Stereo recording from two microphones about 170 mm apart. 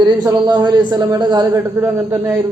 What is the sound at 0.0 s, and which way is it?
A man's voice, 25° right (ahead or behind).